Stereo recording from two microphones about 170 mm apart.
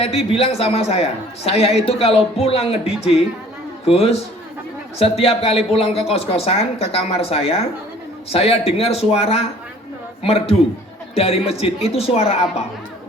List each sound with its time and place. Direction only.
0.0 s a woman's voice: 35° left (ahead or behind)